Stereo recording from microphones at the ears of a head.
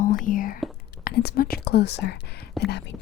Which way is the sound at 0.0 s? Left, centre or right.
Left.